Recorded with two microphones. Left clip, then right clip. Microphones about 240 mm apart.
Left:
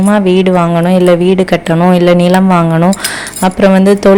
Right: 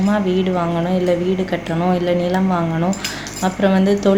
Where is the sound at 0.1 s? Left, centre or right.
Left.